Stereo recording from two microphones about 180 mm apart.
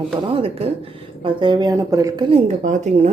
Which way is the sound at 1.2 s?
25° right (ahead or behind).